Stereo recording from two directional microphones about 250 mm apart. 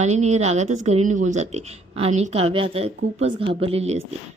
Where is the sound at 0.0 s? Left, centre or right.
Right.